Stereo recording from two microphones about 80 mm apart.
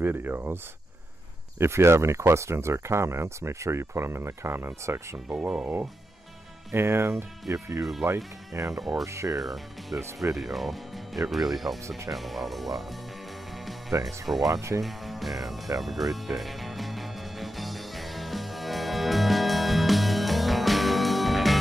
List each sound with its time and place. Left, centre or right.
0.0 s speech: right
1.6 s speech: right
6.7 s speech: right
7.4 s speech: right
8.7 s speech: centre
9.0 s speech: right
9.4 s speech: centre
14.0 s speech: centre
14.5 s speech: right
14.8 s speech: centre
15.8 s music: centre